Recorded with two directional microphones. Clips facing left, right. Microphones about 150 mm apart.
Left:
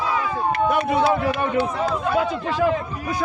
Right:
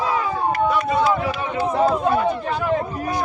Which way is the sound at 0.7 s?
60° left (ahead or behind).